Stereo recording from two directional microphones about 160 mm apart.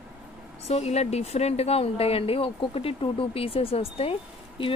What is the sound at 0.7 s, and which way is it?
Speech, 45° left (ahead or behind).